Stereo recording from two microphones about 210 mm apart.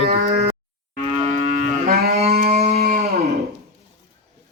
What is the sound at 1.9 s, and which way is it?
Livestock, 50° right (ahead or behind).